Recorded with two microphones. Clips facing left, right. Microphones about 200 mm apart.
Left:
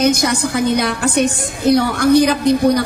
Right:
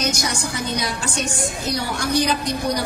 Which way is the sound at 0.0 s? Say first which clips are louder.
Left 9 dB; 60° left (ahead or behind).